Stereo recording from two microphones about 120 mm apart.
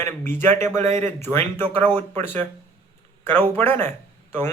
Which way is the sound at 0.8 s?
75° right (ahead or behind).